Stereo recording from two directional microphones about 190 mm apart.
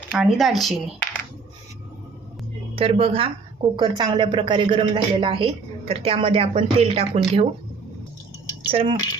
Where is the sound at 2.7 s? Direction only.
30° right (ahead or behind).